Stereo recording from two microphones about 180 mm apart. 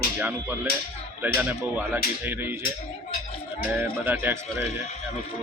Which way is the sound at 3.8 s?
10° right (ahead or behind).